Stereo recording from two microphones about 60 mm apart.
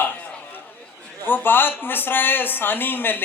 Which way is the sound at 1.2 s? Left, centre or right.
Left.